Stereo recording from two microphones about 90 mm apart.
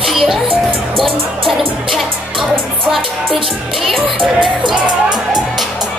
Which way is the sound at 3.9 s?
65° right (ahead or behind).